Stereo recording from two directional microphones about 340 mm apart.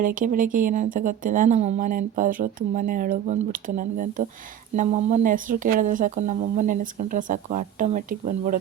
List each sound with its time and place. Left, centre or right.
0.0 s speech: right